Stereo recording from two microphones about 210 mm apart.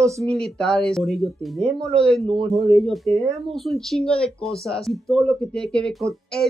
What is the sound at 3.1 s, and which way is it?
Speech, 30° right (ahead or behind).